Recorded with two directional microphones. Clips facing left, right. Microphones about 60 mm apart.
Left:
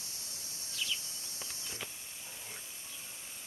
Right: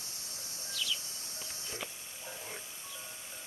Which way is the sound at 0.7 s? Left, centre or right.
Left.